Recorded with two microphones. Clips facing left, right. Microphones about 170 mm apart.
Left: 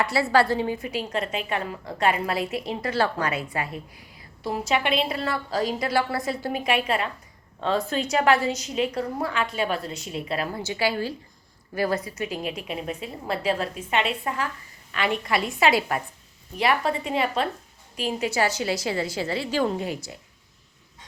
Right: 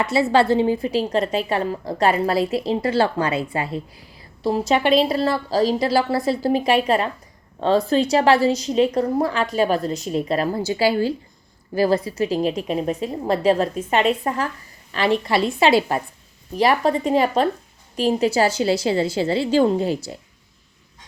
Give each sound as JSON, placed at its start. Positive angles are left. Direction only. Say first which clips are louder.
{"t": 0.0, "sound": "a woman's voice", "louder": "right 4 dB", "side_deg": -20}